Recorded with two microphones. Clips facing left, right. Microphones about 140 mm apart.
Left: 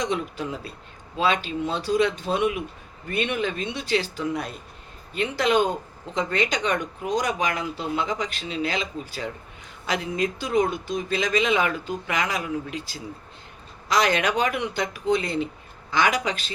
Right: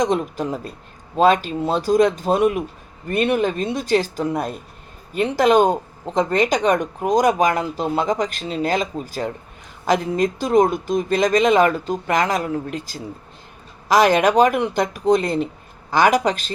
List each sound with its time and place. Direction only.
0.0 s speech: 45° right (ahead or behind)
14.3 s speech: 40° right (ahead or behind)